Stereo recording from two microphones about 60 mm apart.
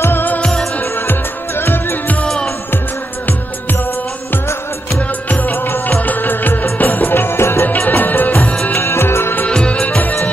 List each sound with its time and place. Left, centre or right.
0.0 s music of bollywood: left
1.6 s music: left
2.2 s music: centre
5.3 s music of bollywood: left
6.0 s music: left
7.6 s music: left
8.7 s music: left
9.5 s music: centre